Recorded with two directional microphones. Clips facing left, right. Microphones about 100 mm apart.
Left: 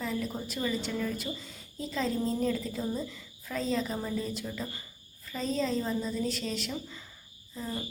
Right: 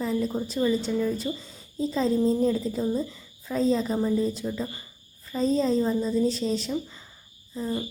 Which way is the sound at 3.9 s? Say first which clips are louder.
Right 9 dB; 20° right (ahead or behind).